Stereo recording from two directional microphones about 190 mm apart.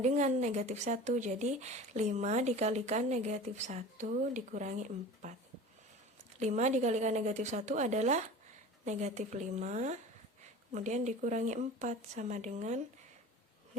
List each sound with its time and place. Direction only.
0.0 s speech: 40° right (ahead or behind)
6.4 s speech: 40° right (ahead or behind)